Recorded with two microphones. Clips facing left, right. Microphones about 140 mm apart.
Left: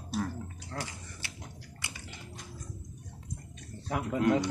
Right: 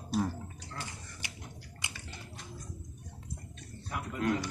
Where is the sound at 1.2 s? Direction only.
15° right (ahead or behind).